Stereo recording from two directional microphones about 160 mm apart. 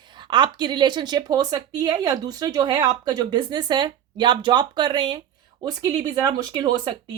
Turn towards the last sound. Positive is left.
turn(degrees=-25)  # may be behind; listen again after turning